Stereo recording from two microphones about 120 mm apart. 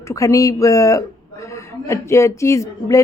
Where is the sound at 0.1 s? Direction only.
25° left (ahead or behind).